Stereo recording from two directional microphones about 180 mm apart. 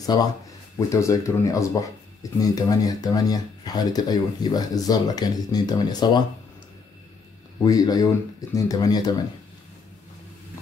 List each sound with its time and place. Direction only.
0.0 s speech: 20° left (ahead or behind)
7.6 s speech: 20° left (ahead or behind)